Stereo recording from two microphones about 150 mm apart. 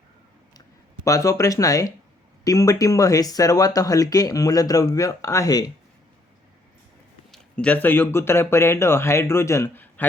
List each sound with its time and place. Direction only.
1.0 s speech: 20° left (ahead or behind)
7.3 s speech: 5° left (ahead or behind)